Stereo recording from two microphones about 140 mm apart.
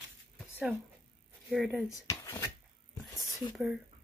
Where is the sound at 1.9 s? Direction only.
20° left (ahead or behind).